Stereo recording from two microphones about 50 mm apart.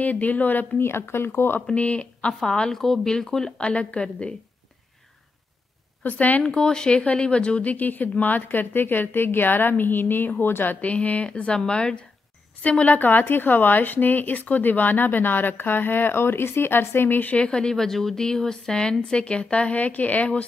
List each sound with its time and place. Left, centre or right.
0.0 s a woman's voice: left
0.7 s a woman's voice: left
1.8 s a woman's voice: left; by 3.5 s centre
3.5 s a woman's voice: left
6.0 s a woman's voice: left
6.4 s a woman's voice: centre; by 17.3 s left
17.3 s a woman's voice: left